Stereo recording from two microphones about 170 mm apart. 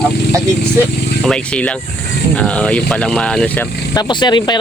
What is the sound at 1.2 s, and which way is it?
Speech, 5° left (ahead or behind).